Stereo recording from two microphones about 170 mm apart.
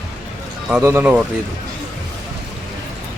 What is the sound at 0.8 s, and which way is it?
Speech, 15° right (ahead or behind).